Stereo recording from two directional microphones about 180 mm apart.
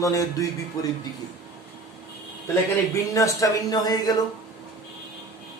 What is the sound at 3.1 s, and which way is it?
A man's voice, 20° left (ahead or behind).